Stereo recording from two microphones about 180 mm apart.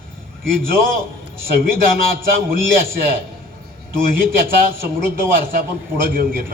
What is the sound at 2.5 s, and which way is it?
A man's voice, 55° right (ahead or behind).